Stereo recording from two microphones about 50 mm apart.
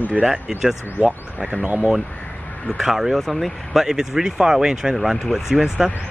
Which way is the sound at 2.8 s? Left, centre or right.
Centre.